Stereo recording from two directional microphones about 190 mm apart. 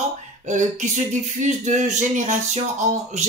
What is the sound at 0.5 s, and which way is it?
Speech, 40° right (ahead or behind).